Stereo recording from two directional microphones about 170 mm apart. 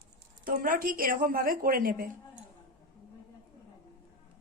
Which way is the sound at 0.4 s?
55° right (ahead or behind).